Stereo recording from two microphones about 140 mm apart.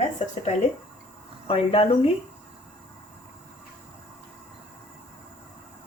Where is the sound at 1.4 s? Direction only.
40° left (ahead or behind).